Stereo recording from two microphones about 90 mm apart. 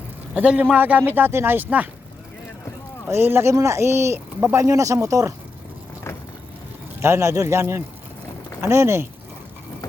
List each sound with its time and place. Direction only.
0.3 s speech: 15° right (ahead or behind)
3.1 s speech: 25° right (ahead or behind)
7.0 s speech: 30° right (ahead or behind)